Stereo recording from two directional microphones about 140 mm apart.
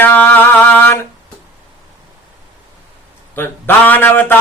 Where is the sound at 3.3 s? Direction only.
15° left (ahead or behind).